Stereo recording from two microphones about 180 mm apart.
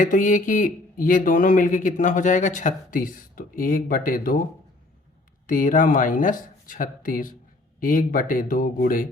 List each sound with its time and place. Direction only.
0.0 s speech: 45° left (ahead or behind)
5.5 s speech: 45° left (ahead or behind)